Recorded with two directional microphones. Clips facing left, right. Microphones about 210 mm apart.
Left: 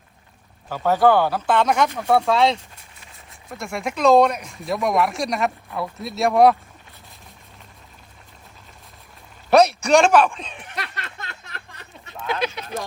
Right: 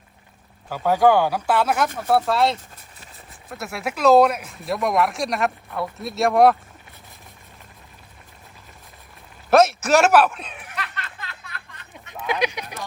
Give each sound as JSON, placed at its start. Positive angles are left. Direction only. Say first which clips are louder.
{"t": 0.7, "sound": "speech", "louder": "even", "side_deg": -10}
{"t": 9.5, "sound": "speech", "louder": "left 1 dB", "side_deg": 0}
{"t": 10.9, "sound": "a sound", "louder": "left 1 dB", "side_deg": 40}
{"t": 12.2, "sound": "speech", "louder": "right 1 dB", "side_deg": -15}